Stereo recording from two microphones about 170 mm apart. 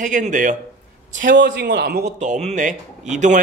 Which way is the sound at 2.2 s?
45° right (ahead or behind).